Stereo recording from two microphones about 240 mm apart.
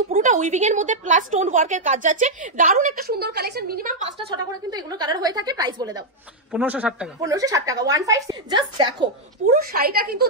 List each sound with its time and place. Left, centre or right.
0.1 s a woman's voice: right
4.2 s a woman's voice: centre
9.0 s a woman's voice: right